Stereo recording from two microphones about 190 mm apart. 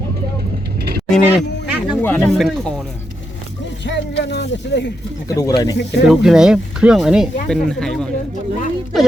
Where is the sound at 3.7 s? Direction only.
65° left (ahead or behind).